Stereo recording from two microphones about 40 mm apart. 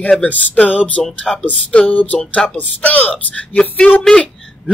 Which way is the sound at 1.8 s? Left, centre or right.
Left.